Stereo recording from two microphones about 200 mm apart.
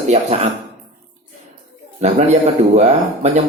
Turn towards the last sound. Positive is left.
turn(degrees=-35)  # may be behind; listen again after turning